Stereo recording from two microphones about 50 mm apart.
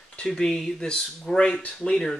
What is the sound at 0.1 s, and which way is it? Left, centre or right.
Speech, centre.